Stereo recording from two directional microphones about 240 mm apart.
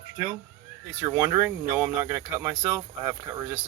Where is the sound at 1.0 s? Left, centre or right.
Centre.